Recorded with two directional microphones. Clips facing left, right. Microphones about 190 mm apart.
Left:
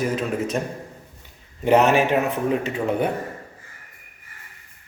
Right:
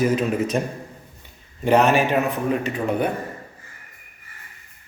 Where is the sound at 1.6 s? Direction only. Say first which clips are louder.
Even; 20° left (ahead or behind).